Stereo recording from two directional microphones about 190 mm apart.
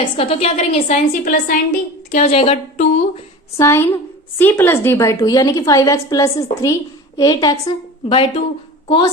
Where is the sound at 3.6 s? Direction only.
15° left (ahead or behind).